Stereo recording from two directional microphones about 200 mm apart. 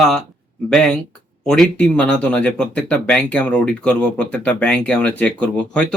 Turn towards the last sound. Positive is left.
turn(degrees=5)  # may be behind; listen again after turning